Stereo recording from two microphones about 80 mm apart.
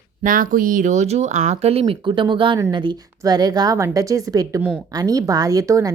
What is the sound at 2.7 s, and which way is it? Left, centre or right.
Speech, right.